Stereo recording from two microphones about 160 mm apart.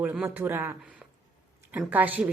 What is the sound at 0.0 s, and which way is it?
A woman's voice, 10° right (ahead or behind).